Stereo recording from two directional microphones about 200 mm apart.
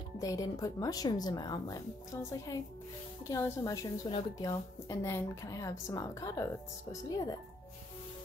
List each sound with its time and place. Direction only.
0.2 s speech: 15° left (ahead or behind)
3.3 s a woman's voice: 15° left (ahead or behind)